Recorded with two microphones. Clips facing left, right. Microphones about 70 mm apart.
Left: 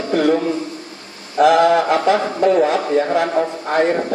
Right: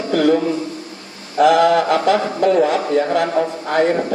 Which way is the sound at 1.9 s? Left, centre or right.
Left.